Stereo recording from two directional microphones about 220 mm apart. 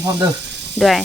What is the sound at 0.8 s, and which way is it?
Speech, centre (ahead or behind).